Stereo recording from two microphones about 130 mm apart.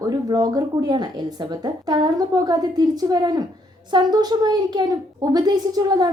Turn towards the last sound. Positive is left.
turn(degrees=-30)  # may be behind; listen again after turning